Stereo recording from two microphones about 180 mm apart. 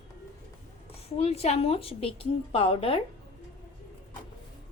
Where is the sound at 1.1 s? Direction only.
35° left (ahead or behind).